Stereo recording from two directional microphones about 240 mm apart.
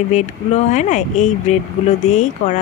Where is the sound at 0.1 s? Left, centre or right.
Left.